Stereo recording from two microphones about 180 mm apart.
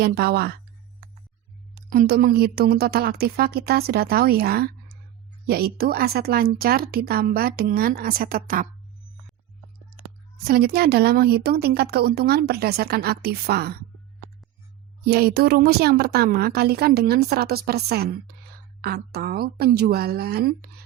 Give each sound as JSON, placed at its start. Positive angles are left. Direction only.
{"t": 0.0, "sound": "a woman's voice", "side_deg": -60}
{"t": 1.9, "sound": "a woman's voice", "side_deg": -55}
{"t": 10.0, "sound": "a woman's voice", "side_deg": -55}
{"t": 15.0, "sound": "a woman's voice", "side_deg": -60}